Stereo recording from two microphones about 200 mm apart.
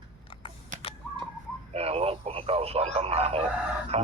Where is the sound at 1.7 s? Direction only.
30° right (ahead or behind).